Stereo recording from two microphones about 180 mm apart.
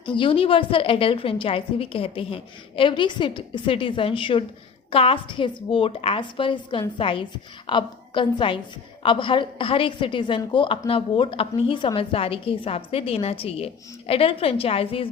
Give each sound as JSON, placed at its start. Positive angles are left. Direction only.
{"t": 0.0, "sound": "a woman's voice", "side_deg": 30}